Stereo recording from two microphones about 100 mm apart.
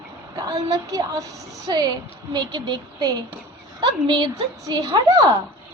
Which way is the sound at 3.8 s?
50° right (ahead or behind).